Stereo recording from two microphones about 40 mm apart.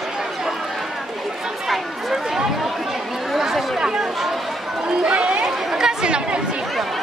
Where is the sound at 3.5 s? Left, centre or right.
Centre.